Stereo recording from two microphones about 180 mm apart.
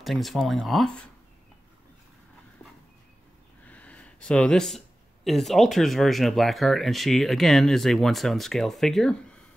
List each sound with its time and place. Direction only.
0.0 s speech: centre (ahead or behind)
3.6 s speech: 5° left (ahead or behind)